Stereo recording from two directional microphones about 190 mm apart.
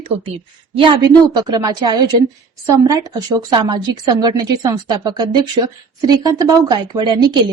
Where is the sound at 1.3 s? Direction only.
20° right (ahead or behind).